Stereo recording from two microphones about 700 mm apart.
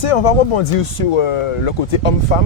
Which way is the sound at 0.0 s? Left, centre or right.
Left.